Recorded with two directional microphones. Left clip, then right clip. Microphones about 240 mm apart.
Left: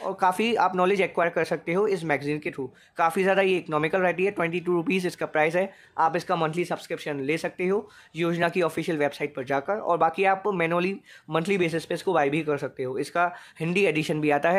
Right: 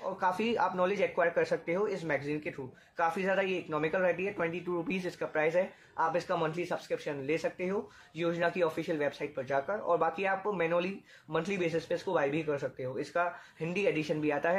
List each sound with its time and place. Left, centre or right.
0.0 s speech: left